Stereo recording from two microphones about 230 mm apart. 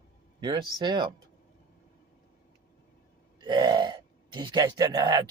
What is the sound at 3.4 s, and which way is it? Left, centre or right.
Speech, centre.